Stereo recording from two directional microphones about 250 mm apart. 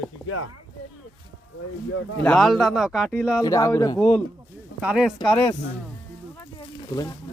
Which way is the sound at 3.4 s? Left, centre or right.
Centre.